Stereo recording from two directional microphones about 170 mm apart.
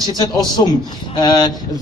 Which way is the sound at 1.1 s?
25° left (ahead or behind).